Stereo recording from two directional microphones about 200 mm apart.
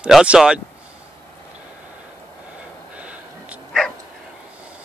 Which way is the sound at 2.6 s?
5° right (ahead or behind).